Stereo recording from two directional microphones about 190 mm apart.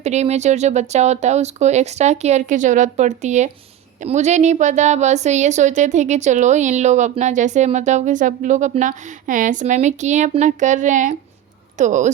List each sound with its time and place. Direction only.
0.0 s a woman's voice: 35° right (ahead or behind)